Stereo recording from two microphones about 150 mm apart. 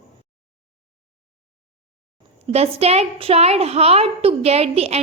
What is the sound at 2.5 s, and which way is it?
A woman's voice, 45° right (ahead or behind).